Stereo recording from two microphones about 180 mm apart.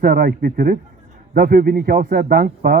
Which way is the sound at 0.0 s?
55° right (ahead or behind).